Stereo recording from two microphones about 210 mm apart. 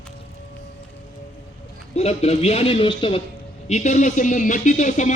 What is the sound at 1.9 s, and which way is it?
A man's voice, 30° left (ahead or behind).